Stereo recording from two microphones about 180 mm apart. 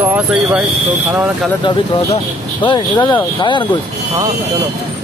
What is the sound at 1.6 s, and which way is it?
Speech, 25° left (ahead or behind).